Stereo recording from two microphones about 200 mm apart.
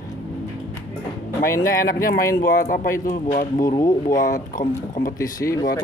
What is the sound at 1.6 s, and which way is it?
Speech, 45° left (ahead or behind).